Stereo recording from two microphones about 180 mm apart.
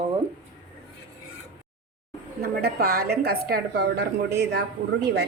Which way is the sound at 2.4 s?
60° right (ahead or behind).